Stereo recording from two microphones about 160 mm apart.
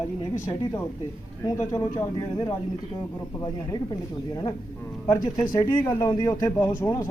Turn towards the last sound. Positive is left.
turn(degrees=20)  # may be behind; listen again after turning